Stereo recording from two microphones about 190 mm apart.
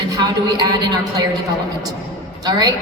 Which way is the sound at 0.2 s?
20° right (ahead or behind).